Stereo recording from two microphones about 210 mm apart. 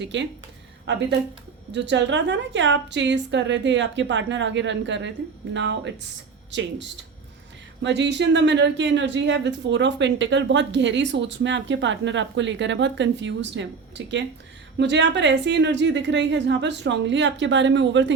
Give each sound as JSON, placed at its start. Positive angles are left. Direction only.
{"t": 0.0, "sound": "speech", "side_deg": -60}
{"t": 1.7, "sound": "speech", "side_deg": -55}